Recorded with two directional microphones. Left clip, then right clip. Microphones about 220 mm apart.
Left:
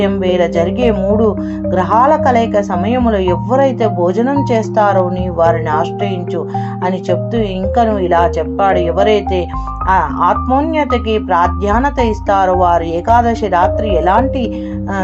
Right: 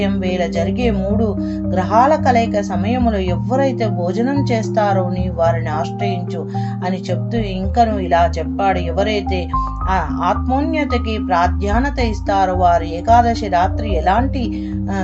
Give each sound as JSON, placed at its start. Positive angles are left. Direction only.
{"t": 0.0, "sound": "speech", "side_deg": 25}
{"t": 6.8, "sound": "speech", "side_deg": 25}